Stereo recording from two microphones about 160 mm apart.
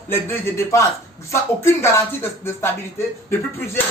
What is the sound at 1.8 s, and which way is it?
A man's voice, 15° left (ahead or behind).